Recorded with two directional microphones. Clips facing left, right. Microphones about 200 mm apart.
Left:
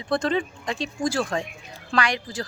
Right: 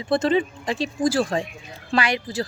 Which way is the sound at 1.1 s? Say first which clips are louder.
Right 4 dB; 35° right (ahead or behind).